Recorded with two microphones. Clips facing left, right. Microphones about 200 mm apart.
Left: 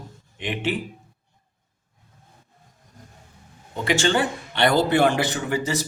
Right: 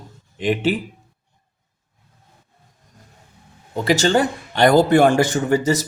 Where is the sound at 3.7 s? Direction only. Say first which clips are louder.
Right 4 dB; 40° right (ahead or behind).